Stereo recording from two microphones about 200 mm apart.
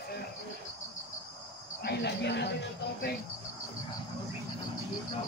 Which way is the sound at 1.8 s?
55° left (ahead or behind).